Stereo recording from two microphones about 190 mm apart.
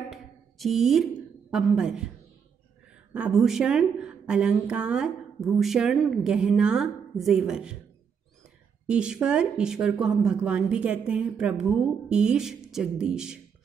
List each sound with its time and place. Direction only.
0.1 s a sound: centre (ahead or behind)
1.5 s a woman's voice: 5° right (ahead or behind)
3.1 s a woman's voice: 5° right (ahead or behind)
8.8 s a woman's voice: 5° right (ahead or behind)